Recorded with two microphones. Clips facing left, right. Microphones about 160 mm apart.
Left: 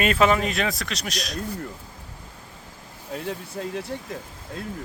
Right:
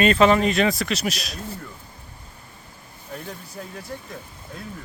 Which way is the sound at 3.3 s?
75° left (ahead or behind).